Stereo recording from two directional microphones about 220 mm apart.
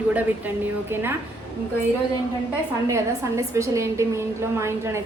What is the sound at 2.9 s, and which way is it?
A woman's voice, 15° right (ahead or behind).